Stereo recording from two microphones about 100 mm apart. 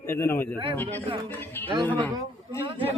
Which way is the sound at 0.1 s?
25° left (ahead or behind).